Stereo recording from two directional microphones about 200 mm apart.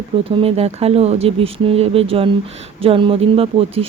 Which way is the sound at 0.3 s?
30° right (ahead or behind).